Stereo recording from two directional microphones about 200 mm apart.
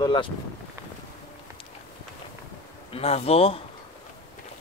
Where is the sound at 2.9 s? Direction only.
30° left (ahead or behind).